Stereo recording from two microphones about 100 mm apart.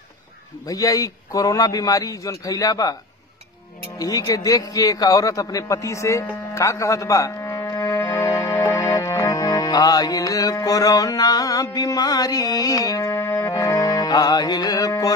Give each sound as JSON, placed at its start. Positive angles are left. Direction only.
{"t": 0.7, "sound": "a man's voice", "side_deg": 35}
{"t": 4.0, "sound": "a man's voice", "side_deg": 35}
{"t": 7.8, "sound": "music", "side_deg": 25}
{"t": 13.1, "sound": "music", "side_deg": 20}
{"t": 13.5, "sound": "music", "side_deg": 35}